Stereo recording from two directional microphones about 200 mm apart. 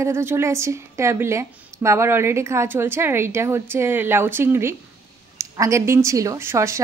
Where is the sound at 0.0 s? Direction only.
10° right (ahead or behind).